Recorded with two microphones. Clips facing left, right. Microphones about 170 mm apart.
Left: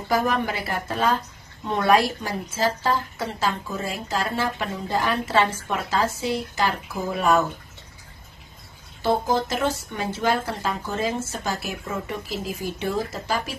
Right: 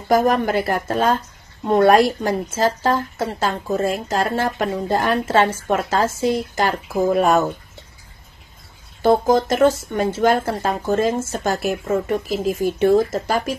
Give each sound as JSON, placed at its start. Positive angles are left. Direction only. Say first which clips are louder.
{"t": 0.1, "sound": "a woman's voice", "louder": "right 7 dB", "side_deg": -45}
{"t": 9.0, "sound": "a woman's voice", "louder": "right 7 dB", "side_deg": -45}